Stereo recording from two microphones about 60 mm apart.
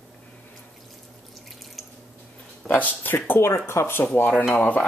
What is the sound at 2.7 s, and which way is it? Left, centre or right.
Speech, left.